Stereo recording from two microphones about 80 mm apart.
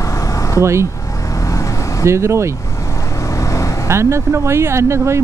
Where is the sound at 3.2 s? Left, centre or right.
Left.